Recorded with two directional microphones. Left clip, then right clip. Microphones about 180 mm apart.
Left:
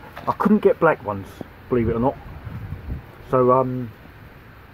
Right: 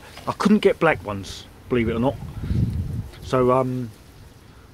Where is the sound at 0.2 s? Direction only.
15° right (ahead or behind).